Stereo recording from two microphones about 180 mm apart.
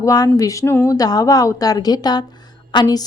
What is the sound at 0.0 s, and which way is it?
A woman's voice, 20° left (ahead or behind).